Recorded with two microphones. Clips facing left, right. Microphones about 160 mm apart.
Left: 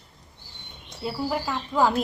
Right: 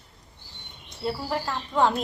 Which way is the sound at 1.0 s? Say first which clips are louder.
Left 1 dB; 5° left (ahead or behind).